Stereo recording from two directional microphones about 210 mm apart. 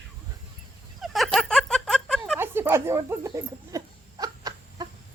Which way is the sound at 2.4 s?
10° right (ahead or behind).